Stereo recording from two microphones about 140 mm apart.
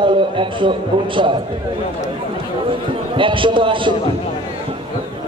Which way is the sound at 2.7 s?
35° right (ahead or behind).